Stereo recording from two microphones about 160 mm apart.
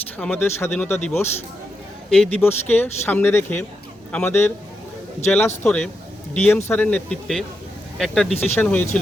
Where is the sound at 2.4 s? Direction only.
15° left (ahead or behind).